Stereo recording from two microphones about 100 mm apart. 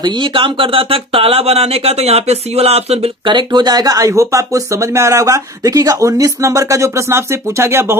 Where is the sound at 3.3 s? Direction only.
50° right (ahead or behind).